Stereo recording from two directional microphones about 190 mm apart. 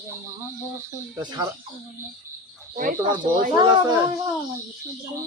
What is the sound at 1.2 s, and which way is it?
Speech, 20° right (ahead or behind).